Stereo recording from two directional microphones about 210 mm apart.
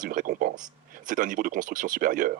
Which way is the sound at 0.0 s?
40° right (ahead or behind).